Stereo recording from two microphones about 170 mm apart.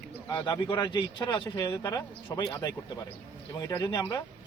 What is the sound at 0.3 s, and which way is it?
Speech, 25° left (ahead or behind).